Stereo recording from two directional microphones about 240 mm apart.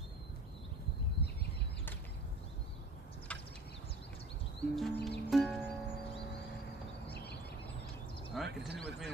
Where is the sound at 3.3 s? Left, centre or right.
Centre.